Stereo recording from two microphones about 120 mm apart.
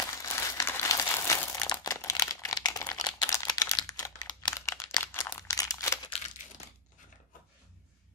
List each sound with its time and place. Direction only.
0.2 s crumpling: 25° left (ahead or behind)
3.2 s a sound: 30° left (ahead or behind)
5.6 s crumpling: 30° left (ahead or behind)